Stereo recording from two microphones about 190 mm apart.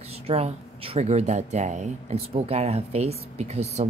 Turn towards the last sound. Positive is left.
turn(degrees=-35)  # may be behind; listen again after turning